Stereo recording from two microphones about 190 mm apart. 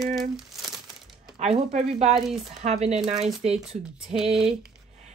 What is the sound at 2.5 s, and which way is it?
Speech, 35° right (ahead or behind).